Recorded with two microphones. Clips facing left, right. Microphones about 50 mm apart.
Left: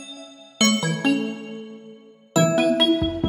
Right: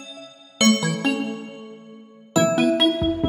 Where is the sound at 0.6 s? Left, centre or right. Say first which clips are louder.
Right 1 dB; centre.